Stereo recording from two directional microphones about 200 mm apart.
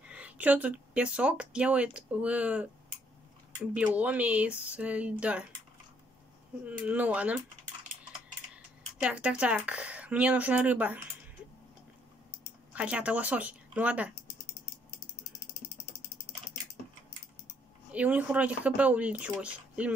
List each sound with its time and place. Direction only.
0.0 s speech: 5° right (ahead or behind)
3.7 s speech: 5° right (ahead or behind)
6.6 s speech: 5° right (ahead or behind)
9.0 s speech: 5° right (ahead or behind)
12.7 s speech: 5° right (ahead or behind)
17.9 s speech: 5° right (ahead or behind)